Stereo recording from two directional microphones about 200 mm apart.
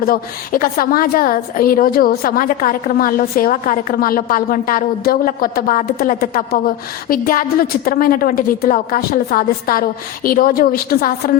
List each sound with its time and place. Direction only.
0.0 s a woman's voice: 45° left (ahead or behind)